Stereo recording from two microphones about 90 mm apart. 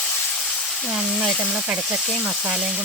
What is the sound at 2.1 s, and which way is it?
Speech, 10° right (ahead or behind).